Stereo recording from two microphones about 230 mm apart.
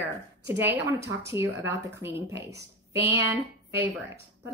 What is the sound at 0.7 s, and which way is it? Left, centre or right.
Speech, centre.